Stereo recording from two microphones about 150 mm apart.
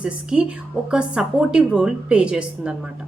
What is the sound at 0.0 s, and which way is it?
A woman's voice, 5° right (ahead or behind).